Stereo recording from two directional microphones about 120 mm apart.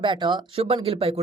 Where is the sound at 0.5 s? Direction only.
55° right (ahead or behind).